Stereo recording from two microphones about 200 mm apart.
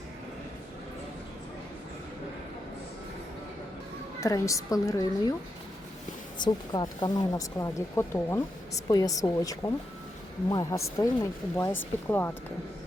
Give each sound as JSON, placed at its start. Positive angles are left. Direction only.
{"t": 4.2, "sound": "a woman's voice", "side_deg": 15}
{"t": 6.4, "sound": "a woman's voice", "side_deg": 20}